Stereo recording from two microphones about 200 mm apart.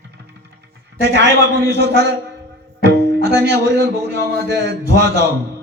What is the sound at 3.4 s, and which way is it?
Speech, 55° right (ahead or behind).